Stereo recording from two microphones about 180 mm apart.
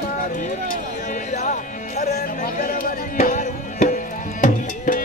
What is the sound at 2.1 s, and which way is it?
Music, 55° left (ahead or behind).